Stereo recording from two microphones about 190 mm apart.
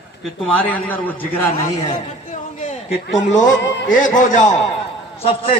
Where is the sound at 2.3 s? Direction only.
40° left (ahead or behind).